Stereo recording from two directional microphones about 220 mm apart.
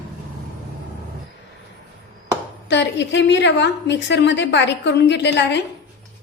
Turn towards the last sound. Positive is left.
turn(degrees=50)  # may be behind; listen again after turning